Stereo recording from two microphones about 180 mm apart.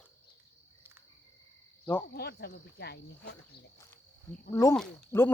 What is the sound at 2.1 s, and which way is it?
Speech, 60° left (ahead or behind).